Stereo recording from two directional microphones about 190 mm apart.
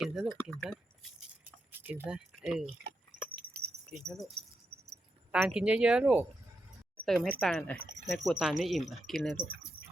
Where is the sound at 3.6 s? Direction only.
55° right (ahead or behind).